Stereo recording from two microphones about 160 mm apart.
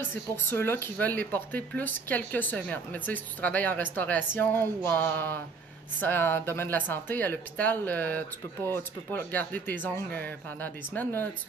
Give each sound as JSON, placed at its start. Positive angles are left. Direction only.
{"t": 0.0, "sound": "speech", "side_deg": 15}